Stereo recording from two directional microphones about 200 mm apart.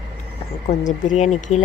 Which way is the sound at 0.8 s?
40° left (ahead or behind).